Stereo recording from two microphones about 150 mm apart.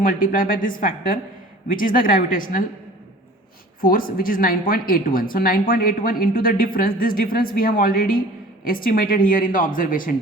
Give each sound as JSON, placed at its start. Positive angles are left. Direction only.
{"t": 0.0, "sound": "speech", "side_deg": 65}
{"t": 3.8, "sound": "speech", "side_deg": 70}